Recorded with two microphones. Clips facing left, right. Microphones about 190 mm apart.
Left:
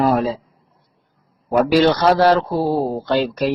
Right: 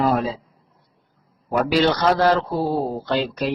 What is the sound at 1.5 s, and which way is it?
Mantra, 45° left (ahead or behind).